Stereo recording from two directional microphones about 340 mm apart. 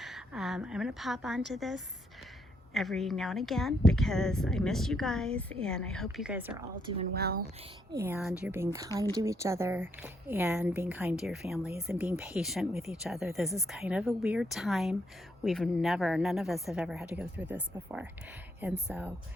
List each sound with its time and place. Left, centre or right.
0.0 s a woman's voice: centre
7.1 s speech: right
7.9 s a woman's voice: centre